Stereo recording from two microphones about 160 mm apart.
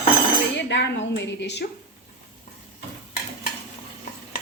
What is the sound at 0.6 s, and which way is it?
Cutlery, 90° left.